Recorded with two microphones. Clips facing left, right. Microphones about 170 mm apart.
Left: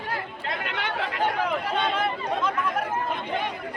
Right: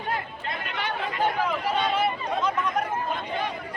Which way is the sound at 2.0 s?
Centre (ahead or behind).